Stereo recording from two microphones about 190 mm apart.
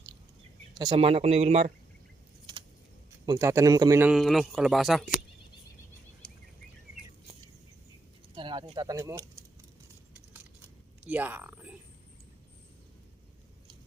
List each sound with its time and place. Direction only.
0.7 s speech: 25° right (ahead or behind)
3.2 s a man's voice: 15° right (ahead or behind)
4.1 s speech: centre (ahead or behind)
6.2 s a sound: 55° left (ahead or behind)
8.4 s speech: 25° right (ahead or behind)
11.0 s speech: 10° right (ahead or behind)